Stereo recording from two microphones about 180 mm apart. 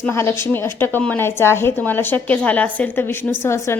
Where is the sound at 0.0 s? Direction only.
15° left (ahead or behind).